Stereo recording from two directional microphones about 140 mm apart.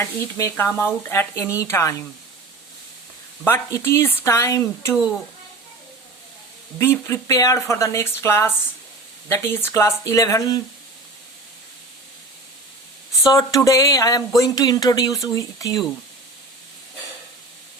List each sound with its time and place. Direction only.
0.0 s sizzle: 20° left (ahead or behind)
1.5 s speech: 20° left (ahead or behind)
3.4 s speech: 20° left (ahead or behind)
6.7 s speech: 15° left (ahead or behind)
13.2 s speech: 25° left (ahead or behind)